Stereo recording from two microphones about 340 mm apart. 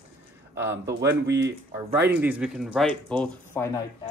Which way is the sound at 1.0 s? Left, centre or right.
Right.